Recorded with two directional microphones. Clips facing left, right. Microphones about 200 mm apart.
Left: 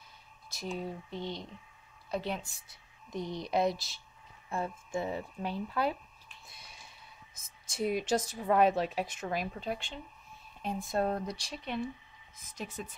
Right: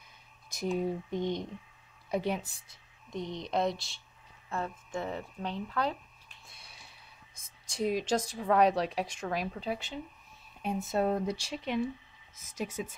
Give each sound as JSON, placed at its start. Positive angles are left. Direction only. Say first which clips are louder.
{"t": 0.5, "sound": "speech", "louder": "right 6 dB", "side_deg": -15}
{"t": 3.3, "sound": "speech", "louder": "left 1 dB", "side_deg": 5}
{"t": 4.5, "sound": "speech", "louder": "left 1 dB", "side_deg": 10}
{"t": 7.3, "sound": "speech", "louder": "right 1 dB", "side_deg": 5}
{"t": 12.4, "sound": "speech", "louder": "right 5 dB", "side_deg": -45}